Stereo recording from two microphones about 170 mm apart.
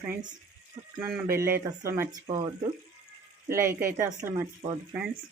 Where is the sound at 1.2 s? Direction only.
60° right (ahead or behind).